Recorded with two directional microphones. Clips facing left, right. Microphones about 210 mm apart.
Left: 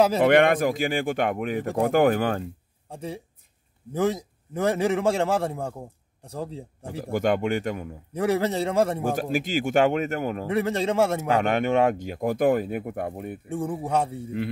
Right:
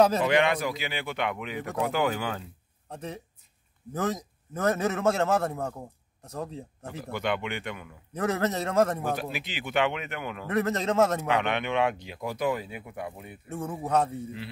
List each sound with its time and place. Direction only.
0.2 s speech: 55° left (ahead or behind)
2.9 s a man's voice: 10° left (ahead or behind)
7.1 s speech: 45° left (ahead or behind)
8.1 s a man's voice: 10° left (ahead or behind)
9.0 s speech: 45° left (ahead or behind)
10.4 s a man's voice: 10° left (ahead or behind)
11.4 s speech: 45° left (ahead or behind)
13.8 s a man's voice: 10° left (ahead or behind)